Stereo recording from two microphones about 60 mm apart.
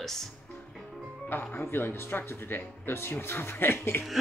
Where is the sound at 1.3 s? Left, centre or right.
Left.